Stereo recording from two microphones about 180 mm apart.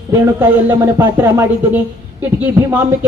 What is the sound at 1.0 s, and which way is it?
A woman's voice, 10° right (ahead or behind).